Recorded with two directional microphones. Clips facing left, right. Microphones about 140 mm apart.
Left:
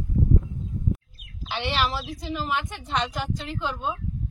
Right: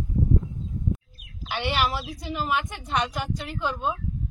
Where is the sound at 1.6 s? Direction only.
10° right (ahead or behind).